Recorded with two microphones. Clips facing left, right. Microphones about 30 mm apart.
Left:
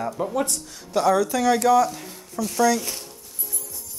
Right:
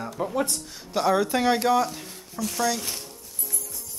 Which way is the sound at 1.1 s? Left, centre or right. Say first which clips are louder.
Left 2 dB; right.